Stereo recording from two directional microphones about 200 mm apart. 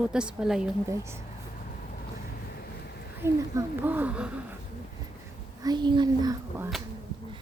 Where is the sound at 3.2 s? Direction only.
15° right (ahead or behind).